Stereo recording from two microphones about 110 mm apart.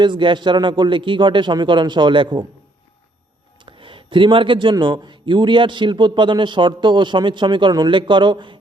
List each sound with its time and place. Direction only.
0.0 s speech: 45° right (ahead or behind)
3.6 s speech: 50° right (ahead or behind)